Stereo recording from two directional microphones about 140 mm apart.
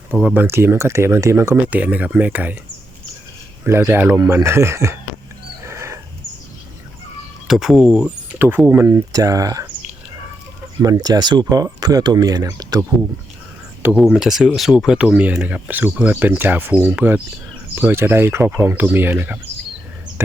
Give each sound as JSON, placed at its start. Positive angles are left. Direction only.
{"t": 0.2, "sound": "speech", "side_deg": -5}
{"t": 0.4, "sound": "speech", "side_deg": -15}
{"t": 3.6, "sound": "speech", "side_deg": -15}
{"t": 5.6, "sound": "wild animals", "side_deg": -20}
{"t": 7.4, "sound": "speech", "side_deg": 0}
{"t": 10.8, "sound": "speech", "side_deg": -30}
{"t": 13.8, "sound": "speech", "side_deg": -5}